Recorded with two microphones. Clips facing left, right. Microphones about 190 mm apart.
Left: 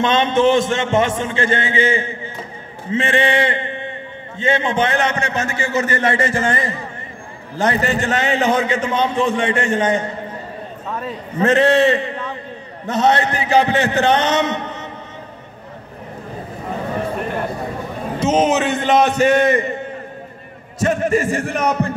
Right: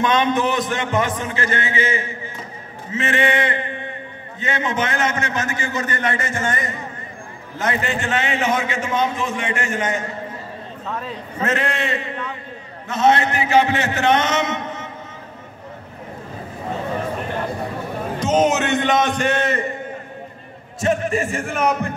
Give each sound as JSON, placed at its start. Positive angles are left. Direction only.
{"t": 0.0, "sound": "a man's voice", "side_deg": 25}
{"t": 10.9, "sound": "a man's voice", "side_deg": 5}
{"t": 11.4, "sound": "a man's voice", "side_deg": 30}
{"t": 18.2, "sound": "a man's voice", "side_deg": 5}
{"t": 20.8, "sound": "a man's voice", "side_deg": 40}